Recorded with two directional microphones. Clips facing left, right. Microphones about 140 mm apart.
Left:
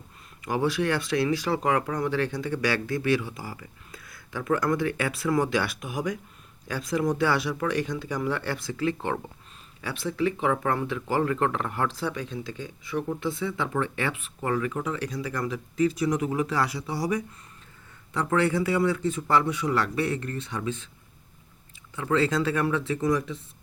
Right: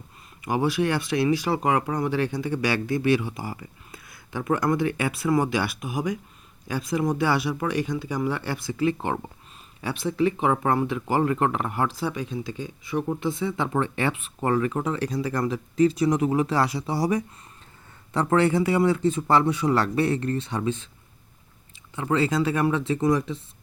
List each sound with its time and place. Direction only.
0.4 s speech: 15° right (ahead or behind)
14.4 s speech: 35° right (ahead or behind)
21.9 s speech: 20° right (ahead or behind)